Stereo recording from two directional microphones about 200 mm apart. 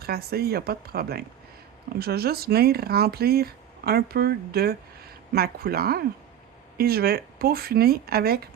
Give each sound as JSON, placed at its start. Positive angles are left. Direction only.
{"t": 0.0, "sound": "speech", "side_deg": -50}